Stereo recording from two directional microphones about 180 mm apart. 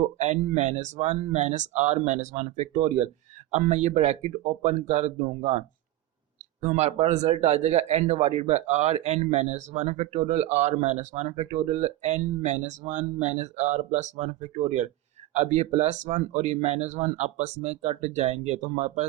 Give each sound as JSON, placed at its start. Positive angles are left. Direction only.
{"t": 0.0, "sound": "speech", "side_deg": -40}